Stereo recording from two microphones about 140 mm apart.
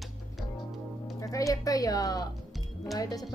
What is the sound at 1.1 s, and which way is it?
A woman's voice, 25° left (ahead or behind).